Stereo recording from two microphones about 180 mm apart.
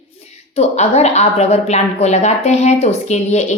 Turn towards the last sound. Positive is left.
turn(degrees=40)  # may be behind; listen again after turning